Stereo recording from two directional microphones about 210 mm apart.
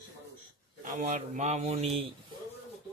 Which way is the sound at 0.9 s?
35° right (ahead or behind).